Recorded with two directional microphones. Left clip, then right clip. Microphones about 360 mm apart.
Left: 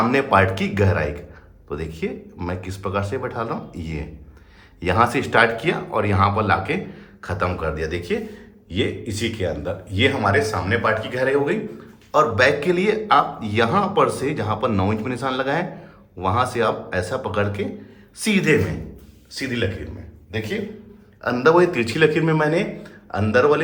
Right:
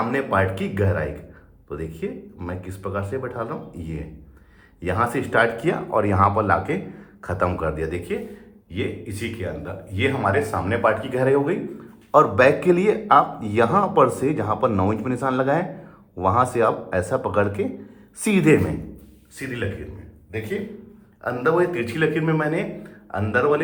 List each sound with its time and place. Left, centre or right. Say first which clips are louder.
0.1 s speech: left 4 dB; centre
19.4 s speech: left 5 dB; centre
21.2 s speech: left 4 dB; centre